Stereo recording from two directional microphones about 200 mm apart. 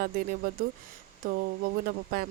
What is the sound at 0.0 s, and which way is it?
Speech, 45° right (ahead or behind).